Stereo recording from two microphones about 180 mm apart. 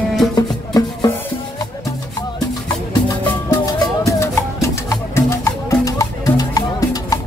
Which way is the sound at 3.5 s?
20° left (ahead or behind).